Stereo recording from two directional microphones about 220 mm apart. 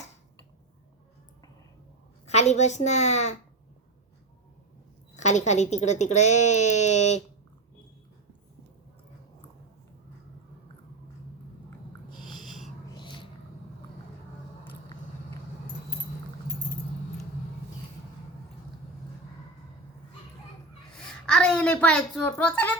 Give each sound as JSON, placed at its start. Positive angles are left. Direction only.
{"t": 2.2, "sound": "speech", "side_deg": 30}
{"t": 5.1, "sound": "speech", "side_deg": 30}
{"t": 12.1, "sound": "snort", "side_deg": 0}
{"t": 12.9, "sound": "a sound", "side_deg": 20}
{"t": 21.0, "sound": "a woman's voice", "side_deg": 5}